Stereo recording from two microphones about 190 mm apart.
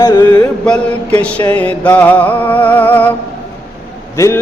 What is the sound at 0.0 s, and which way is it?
A man's voice, 15° left (ahead or behind).